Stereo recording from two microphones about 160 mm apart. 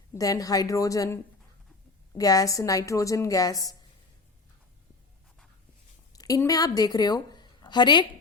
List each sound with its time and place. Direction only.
0.1 s a woman's voice: 20° left (ahead or behind)
6.1 s a woman's voice: 20° left (ahead or behind)